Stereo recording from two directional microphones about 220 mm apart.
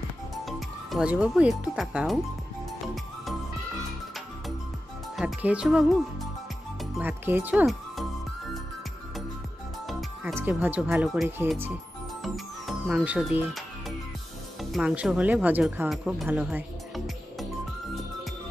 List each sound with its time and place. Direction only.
0.5 s speech: centre (ahead or behind)
5.1 s speech: 5° right (ahead or behind)
7.0 s speech: 10° right (ahead or behind)
9.8 s speech: centre (ahead or behind)
12.2 s music: centre (ahead or behind)
14.6 s speech: centre (ahead or behind)